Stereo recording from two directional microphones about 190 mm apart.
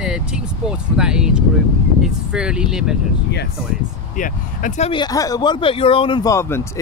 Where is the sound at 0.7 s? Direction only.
5° right (ahead or behind).